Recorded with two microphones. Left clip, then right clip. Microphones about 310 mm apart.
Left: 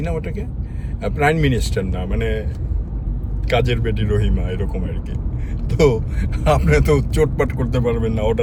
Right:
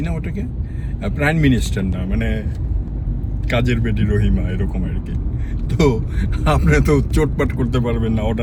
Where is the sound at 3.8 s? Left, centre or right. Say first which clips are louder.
Even; centre.